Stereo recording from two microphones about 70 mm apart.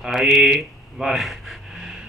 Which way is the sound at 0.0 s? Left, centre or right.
Centre.